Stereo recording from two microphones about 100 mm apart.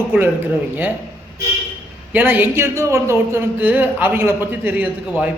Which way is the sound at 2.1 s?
20° right (ahead or behind).